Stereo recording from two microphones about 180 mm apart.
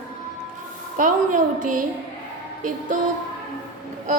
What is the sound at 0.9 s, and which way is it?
Speech, 45° right (ahead or behind).